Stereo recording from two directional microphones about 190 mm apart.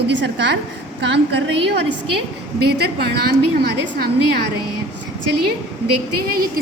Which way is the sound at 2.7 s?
55° right (ahead or behind).